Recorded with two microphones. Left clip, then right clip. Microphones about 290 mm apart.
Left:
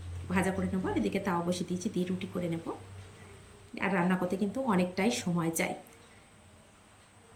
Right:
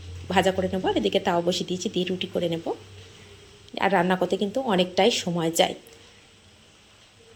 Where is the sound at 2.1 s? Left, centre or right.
Right.